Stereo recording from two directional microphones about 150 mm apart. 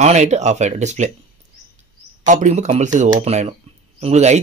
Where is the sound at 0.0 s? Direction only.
50° right (ahead or behind).